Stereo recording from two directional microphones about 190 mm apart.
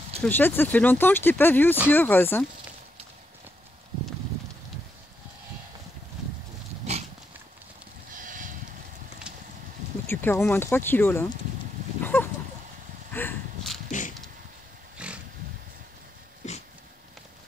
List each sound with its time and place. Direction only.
0.2 s speech: 10° left (ahead or behind)
6.9 s dog: 35° right (ahead or behind)
8.1 s a sound: 45° right (ahead or behind)
9.3 s horse: 5° right (ahead or behind)
10.0 s speech: 10° left (ahead or behind)
12.0 s a sound: 10° left (ahead or behind)
13.8 s a sound: 40° left (ahead or behind)
15.0 s roaring cats: 5° right (ahead or behind)
16.4 s dog: 40° left (ahead or behind)